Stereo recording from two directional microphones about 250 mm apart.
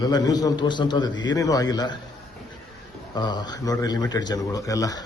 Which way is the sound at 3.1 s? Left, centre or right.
Centre.